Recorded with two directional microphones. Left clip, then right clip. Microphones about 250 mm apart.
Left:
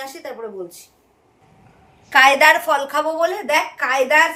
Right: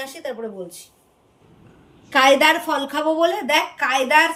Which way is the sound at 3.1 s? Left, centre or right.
Centre.